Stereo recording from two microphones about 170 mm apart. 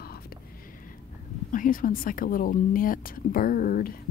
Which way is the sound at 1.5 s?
55° left (ahead or behind).